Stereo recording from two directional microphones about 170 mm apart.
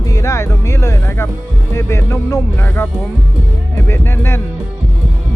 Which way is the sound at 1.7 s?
15° left (ahead or behind).